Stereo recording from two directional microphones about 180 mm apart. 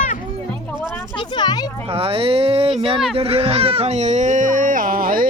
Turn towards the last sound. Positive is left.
turn(degrees=-50)  # may be behind; listen again after turning